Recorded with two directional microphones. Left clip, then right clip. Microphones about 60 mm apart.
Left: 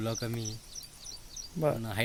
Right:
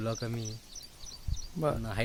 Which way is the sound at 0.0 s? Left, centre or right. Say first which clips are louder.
Left 1 dB; centre.